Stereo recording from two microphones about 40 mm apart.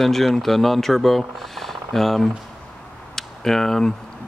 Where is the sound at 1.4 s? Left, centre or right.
Centre.